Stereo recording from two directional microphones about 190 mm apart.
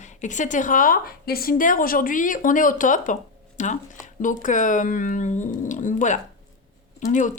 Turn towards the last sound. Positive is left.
turn(degrees=40)  # may be behind; listen again after turning